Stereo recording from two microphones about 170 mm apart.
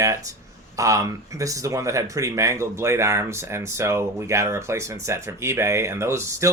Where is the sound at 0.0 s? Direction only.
20° right (ahead or behind).